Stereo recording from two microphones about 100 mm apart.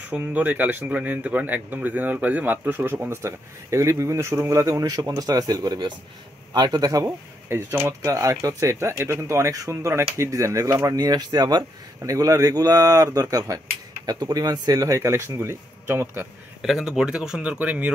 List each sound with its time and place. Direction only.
0.1 s speech: 15° right (ahead or behind); by 7.1 s 35° right (ahead or behind)
7.1 s speech: 25° right (ahead or behind)
16.6 s speech: 5° right (ahead or behind)